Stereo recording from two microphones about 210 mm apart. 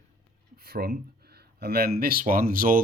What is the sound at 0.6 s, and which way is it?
Speech, 45° right (ahead or behind).